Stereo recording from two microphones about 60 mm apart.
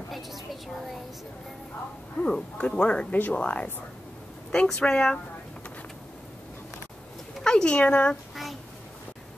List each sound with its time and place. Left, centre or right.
2.1 s speech: left
7.4 s a sound: centre
7.8 s speech: left